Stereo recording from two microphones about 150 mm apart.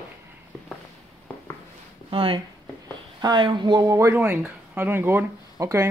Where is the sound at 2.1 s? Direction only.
35° right (ahead or behind).